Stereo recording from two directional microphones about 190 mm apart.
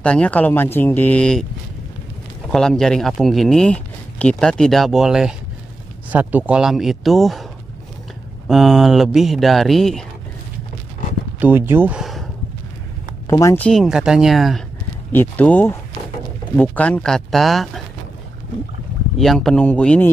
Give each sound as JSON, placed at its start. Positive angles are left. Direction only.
{"t": 0.0, "sound": "speech", "side_deg": 5}
{"t": 2.5, "sound": "speech", "side_deg": 5}
{"t": 8.5, "sound": "speech", "side_deg": 0}
{"t": 11.3, "sound": "speech", "side_deg": -10}
{"t": 13.3, "sound": "speech", "side_deg": 15}
{"t": 13.7, "sound": "speech", "side_deg": 0}
{"t": 19.1, "sound": "speech", "side_deg": 0}